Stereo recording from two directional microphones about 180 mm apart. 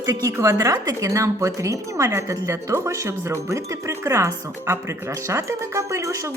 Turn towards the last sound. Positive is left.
turn(degrees=-15)  # may be behind; listen again after turning